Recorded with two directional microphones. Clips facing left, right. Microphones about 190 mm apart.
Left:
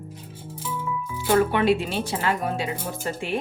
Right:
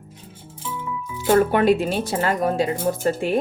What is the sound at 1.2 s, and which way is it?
Speech, 45° right (ahead or behind).